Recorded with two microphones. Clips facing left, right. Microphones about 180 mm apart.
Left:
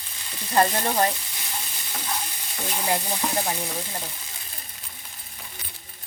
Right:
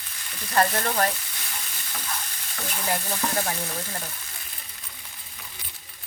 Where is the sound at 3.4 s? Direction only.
15° left (ahead or behind).